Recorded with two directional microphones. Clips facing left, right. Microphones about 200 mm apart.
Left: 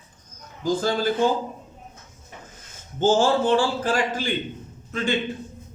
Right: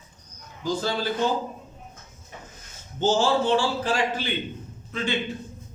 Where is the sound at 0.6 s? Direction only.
50° left (ahead or behind).